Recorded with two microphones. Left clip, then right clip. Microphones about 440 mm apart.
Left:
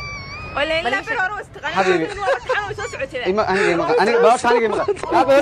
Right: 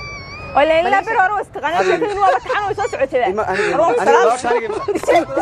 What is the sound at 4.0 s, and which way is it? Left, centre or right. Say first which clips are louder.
Speech: left 2 dB; left.